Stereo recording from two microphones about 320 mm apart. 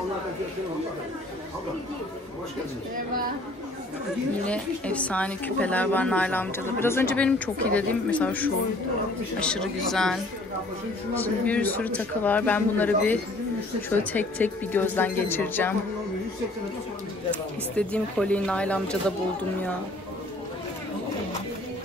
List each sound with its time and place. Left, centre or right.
4.5 s a woman's voice: centre
17.3 s a woman's voice: centre